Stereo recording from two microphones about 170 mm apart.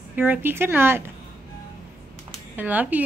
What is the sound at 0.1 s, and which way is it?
Speech, 10° right (ahead or behind).